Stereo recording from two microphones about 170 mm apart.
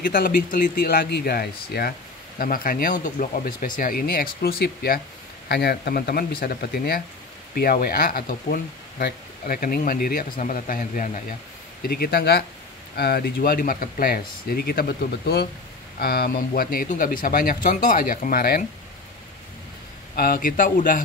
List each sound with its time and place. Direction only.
0.0 s speech: 55° left (ahead or behind)
11.9 s speech: 65° left (ahead or behind)
20.2 s a man's voice: 60° left (ahead or behind)